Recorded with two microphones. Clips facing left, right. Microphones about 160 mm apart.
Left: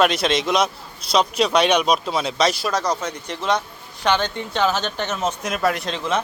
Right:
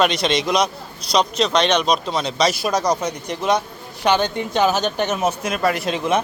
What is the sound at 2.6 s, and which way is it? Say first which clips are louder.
Speech: right 3 dB; 15° right (ahead or behind).